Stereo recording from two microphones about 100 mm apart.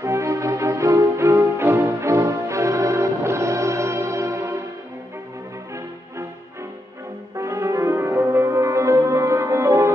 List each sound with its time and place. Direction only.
0.0 s music: 30° right (ahead or behind)
7.3 s music: 30° right (ahead or behind)